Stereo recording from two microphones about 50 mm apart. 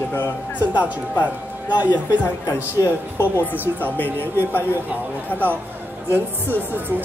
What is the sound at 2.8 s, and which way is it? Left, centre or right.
Speech, left.